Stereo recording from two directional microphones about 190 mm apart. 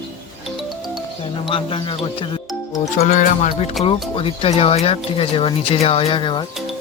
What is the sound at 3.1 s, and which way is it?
Speech, 40° left (ahead or behind).